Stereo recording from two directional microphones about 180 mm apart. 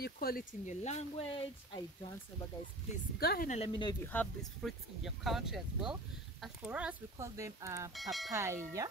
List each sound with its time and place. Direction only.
0.0 s speech: 55° left (ahead or behind); by 1.9 s 25° left (ahead or behind)
3.2 s speech: 60° left (ahead or behind)
3.4 s speech: 35° left (ahead or behind)
4.0 s speech: 10° left (ahead or behind)
4.6 s speech: centre (ahead or behind); by 7.9 s 15° right (ahead or behind)
7.9 s speech: centre (ahead or behind)
8.3 s speech: 15° right (ahead or behind)